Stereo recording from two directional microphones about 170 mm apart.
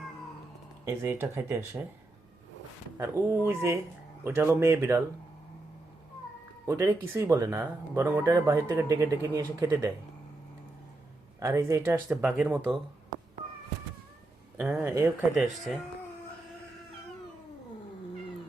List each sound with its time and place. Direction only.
0.9 s speech: 15° right (ahead or behind)
3.0 s speech: 10° right (ahead or behind)
6.7 s speech: 15° right (ahead or behind)
11.3 s speech: 15° right (ahead or behind)
12.0 s speech: centre (ahead or behind)
14.6 s speech: 15° right (ahead or behind)